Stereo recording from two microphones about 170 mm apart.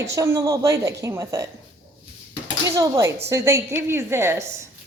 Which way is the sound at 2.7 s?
20° right (ahead or behind).